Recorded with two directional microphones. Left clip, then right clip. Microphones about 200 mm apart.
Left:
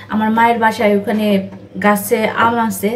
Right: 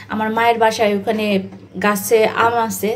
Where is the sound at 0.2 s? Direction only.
40° right (ahead or behind).